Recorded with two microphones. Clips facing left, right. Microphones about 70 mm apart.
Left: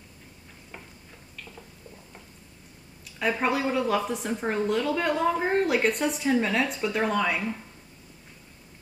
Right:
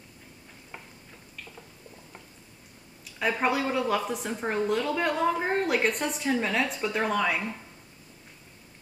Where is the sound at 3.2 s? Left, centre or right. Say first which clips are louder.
Left 1 dB; centre.